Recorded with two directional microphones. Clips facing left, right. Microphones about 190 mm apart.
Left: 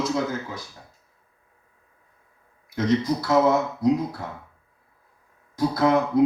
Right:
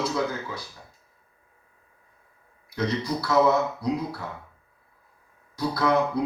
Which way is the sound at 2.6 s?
45° left (ahead or behind).